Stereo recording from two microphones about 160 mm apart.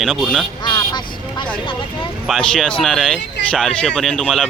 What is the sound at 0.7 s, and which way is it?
Vehicle, 30° left (ahead or behind).